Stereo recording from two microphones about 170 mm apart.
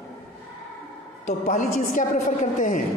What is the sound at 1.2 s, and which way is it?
A woman's voice, 45° left (ahead or behind).